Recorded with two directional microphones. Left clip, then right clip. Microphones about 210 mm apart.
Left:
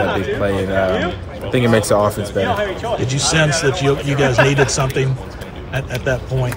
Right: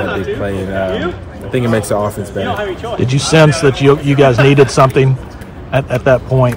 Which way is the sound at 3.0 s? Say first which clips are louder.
Right 8 dB; 20° right (ahead or behind).